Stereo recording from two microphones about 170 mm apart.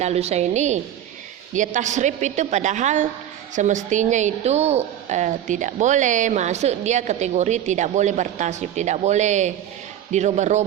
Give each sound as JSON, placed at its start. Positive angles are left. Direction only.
{"t": 0.0, "sound": "a woman's voice", "side_deg": -40}